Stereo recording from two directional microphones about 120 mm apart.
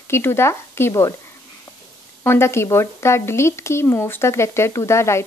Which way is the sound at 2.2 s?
20° left (ahead or behind).